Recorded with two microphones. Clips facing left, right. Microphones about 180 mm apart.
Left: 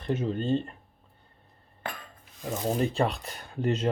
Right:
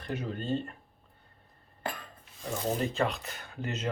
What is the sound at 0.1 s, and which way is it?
Speech, 25° left (ahead or behind).